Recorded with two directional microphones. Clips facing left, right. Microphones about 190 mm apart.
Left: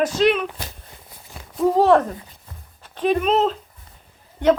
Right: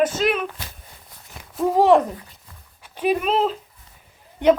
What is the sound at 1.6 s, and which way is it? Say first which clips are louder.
A man's voice: even; 10° right (ahead or behind).